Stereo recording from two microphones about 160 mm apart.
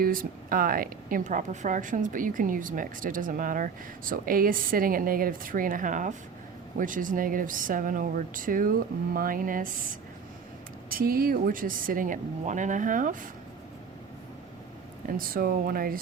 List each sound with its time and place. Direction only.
0.0 s a woman's voice: 60° right (ahead or behind)
10.8 s a woman's voice: 65° right (ahead or behind)
15.2 s a woman's voice: 65° right (ahead or behind)